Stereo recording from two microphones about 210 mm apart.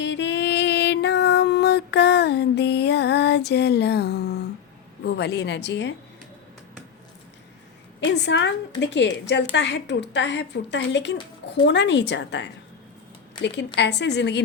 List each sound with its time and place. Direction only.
0.0 s music: 55° left (ahead or behind)
5.0 s a woman's voice: 55° left (ahead or behind)
8.0 s a woman's voice: 55° left (ahead or behind)
13.7 s a woman's voice: 55° left (ahead or behind)